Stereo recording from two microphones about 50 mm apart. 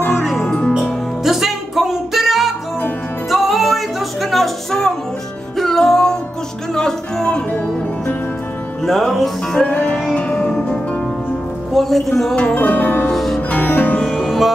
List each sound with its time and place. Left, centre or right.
0.1 s music: centre
0.5 s music: left
0.7 s music: centre
8.8 s music: centre
9.7 s music: left
11.7 s music: centre
12.5 s music: left
13.1 s music: centre
13.5 s music: left
14.0 s music: centre